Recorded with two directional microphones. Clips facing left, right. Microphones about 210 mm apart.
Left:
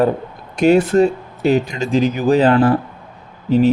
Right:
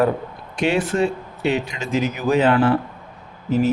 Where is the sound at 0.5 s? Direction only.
40° left (ahead or behind).